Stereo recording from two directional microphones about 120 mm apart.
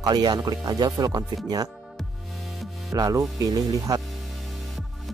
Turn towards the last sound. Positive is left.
turn(degrees=-30)  # may be behind; listen again after turning